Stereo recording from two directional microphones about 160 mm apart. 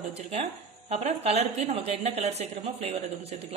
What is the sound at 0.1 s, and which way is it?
A woman's voice, 40° right (ahead or behind).